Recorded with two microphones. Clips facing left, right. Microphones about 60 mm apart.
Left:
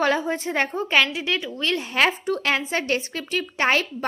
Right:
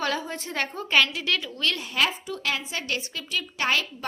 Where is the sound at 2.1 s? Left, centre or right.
Left.